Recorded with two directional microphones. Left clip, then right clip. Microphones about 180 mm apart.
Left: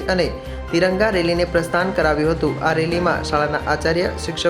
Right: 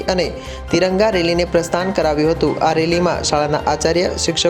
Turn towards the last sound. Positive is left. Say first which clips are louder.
# right 5 dB
turn(degrees=-30)  # may be behind; listen again after turning